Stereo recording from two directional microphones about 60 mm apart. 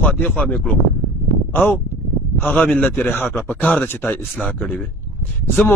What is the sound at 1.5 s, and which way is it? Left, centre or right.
Speech, left.